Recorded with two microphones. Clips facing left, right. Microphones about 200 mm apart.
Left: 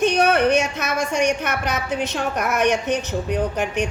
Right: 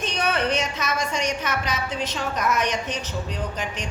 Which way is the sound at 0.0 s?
65° left (ahead or behind).